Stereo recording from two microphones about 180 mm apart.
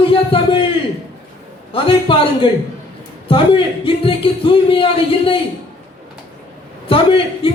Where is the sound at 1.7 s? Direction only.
30° left (ahead or behind).